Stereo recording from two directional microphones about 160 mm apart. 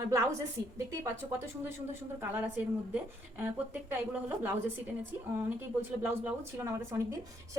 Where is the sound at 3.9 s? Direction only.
15° right (ahead or behind).